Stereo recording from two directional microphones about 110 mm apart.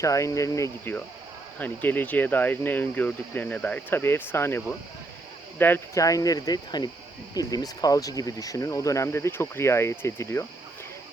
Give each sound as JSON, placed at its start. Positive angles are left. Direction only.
{"t": 0.0, "sound": "speech", "side_deg": 30}
{"t": 1.5, "sound": "speech", "side_deg": 15}
{"t": 6.0, "sound": "speech", "side_deg": 30}